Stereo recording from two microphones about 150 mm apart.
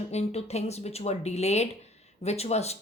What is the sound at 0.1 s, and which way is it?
Speech, 45° left (ahead or behind).